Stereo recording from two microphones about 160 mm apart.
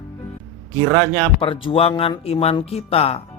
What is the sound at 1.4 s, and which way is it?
A man's voice, 35° left (ahead or behind).